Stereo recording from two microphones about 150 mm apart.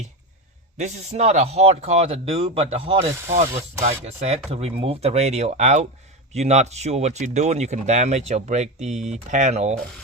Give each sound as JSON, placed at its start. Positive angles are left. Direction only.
{"t": 0.8, "sound": "speech", "side_deg": -50}
{"t": 3.3, "sound": "speech", "side_deg": -50}